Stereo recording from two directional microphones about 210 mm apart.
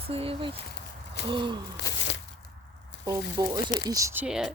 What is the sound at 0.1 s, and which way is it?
Speech, 25° right (ahead or behind).